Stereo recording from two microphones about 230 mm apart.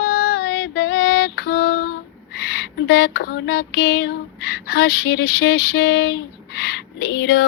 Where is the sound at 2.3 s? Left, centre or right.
Left.